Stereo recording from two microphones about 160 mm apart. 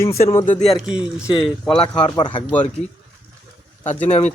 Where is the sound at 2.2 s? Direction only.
30° left (ahead or behind).